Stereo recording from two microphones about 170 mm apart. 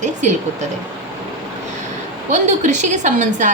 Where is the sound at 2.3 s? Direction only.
45° right (ahead or behind).